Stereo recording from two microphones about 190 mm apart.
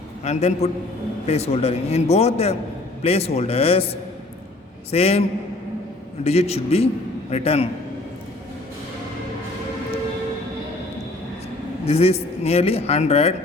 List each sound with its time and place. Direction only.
0.3 s a man's voice: 35° left (ahead or behind)
4.9 s a man's voice: 30° left (ahead or behind)
6.2 s a man's voice: 35° left (ahead or behind)
11.9 s a man's voice: 30° left (ahead or behind)